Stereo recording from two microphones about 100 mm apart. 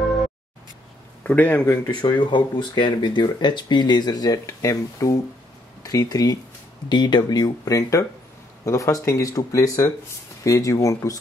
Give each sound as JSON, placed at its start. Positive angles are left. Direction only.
{"t": 0.0, "sound": "music", "side_deg": 0}
{"t": 1.2, "sound": "speech", "side_deg": 15}
{"t": 1.9, "sound": "speech", "side_deg": 45}